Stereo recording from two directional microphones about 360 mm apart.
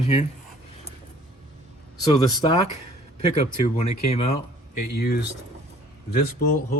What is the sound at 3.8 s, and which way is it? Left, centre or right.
Speech, centre.